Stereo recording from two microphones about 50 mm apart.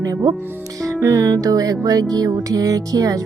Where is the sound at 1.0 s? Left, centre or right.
Right.